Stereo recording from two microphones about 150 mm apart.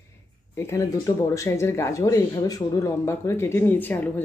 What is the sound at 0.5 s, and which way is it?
Speech, 20° left (ahead or behind).